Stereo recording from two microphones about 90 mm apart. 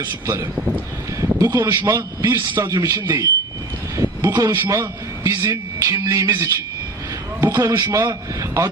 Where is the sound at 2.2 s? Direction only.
30° right (ahead or behind).